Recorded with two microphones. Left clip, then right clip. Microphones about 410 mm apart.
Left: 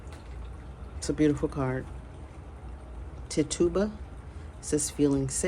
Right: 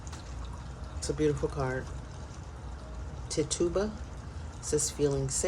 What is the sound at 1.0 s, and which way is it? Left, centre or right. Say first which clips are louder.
Speech: left 3 dB; left.